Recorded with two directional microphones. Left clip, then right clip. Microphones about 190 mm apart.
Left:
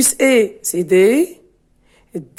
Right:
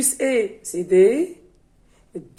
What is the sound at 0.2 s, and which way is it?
Speech, 55° left (ahead or behind).